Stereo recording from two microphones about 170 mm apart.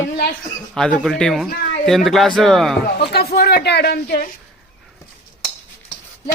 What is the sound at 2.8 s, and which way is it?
Speech, 70° left (ahead or behind).